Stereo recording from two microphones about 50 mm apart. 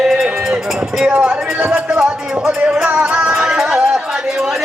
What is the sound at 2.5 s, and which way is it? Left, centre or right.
Music, centre.